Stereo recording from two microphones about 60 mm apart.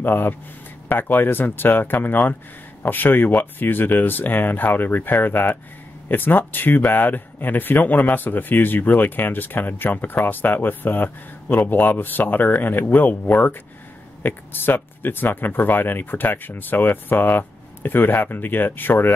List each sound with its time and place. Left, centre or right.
0.0 s speech: left